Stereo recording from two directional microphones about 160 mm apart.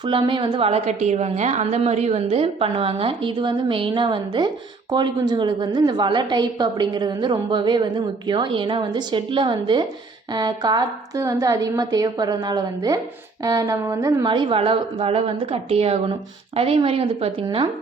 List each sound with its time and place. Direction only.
0.0 s a woman's voice: 30° right (ahead or behind)